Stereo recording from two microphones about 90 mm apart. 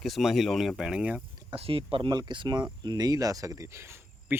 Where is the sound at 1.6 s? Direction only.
80° right.